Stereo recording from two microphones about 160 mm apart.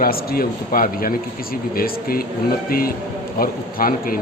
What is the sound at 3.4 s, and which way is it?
Speech, 65° left (ahead or behind).